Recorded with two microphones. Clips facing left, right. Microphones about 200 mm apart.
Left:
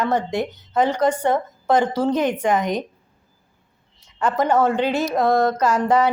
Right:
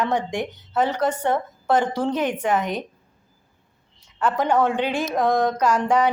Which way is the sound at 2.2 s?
10° right (ahead or behind).